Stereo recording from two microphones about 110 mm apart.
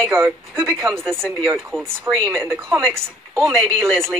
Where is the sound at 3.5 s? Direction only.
5° left (ahead or behind).